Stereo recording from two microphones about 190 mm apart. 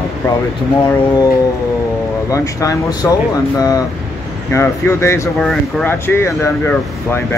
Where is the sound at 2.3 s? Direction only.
15° left (ahead or behind).